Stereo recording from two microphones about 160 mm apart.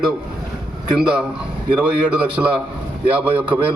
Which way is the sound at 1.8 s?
10° right (ahead or behind).